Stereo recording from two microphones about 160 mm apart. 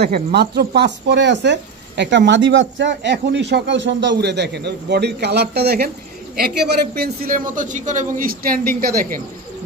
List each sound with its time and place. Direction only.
0.0 s a man's voice: 85° right; by 9.2 s 65° right (ahead or behind)